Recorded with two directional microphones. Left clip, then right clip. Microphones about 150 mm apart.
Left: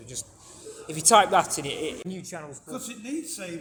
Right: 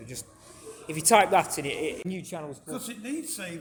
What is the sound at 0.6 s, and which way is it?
Speech, 25° right (ahead or behind).